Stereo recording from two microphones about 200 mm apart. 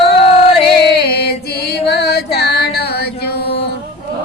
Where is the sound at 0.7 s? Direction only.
55° left (ahead or behind).